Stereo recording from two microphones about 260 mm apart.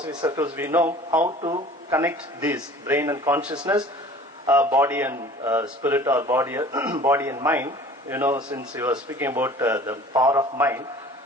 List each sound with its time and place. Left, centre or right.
0.2 s a man's voice: centre
1.4 s speech: right
1.9 s a man's voice: centre